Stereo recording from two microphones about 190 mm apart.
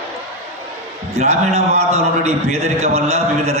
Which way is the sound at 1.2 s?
35° right (ahead or behind).